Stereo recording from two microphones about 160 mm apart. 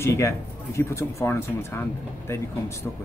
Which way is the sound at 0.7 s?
15° left (ahead or behind).